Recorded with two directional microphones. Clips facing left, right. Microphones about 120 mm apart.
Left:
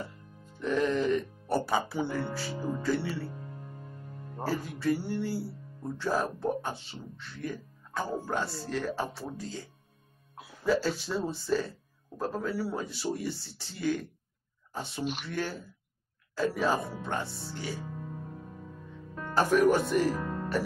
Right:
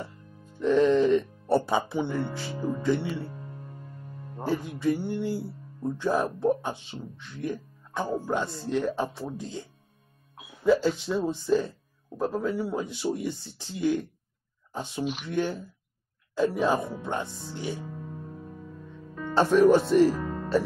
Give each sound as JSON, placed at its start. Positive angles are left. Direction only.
{"t": 0.6, "sound": "speech", "side_deg": -30}
{"t": 4.4, "sound": "speech", "side_deg": -20}
{"t": 19.3, "sound": "speech", "side_deg": -30}